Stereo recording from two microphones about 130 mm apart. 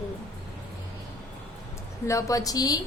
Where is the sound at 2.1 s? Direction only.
25° left (ahead or behind).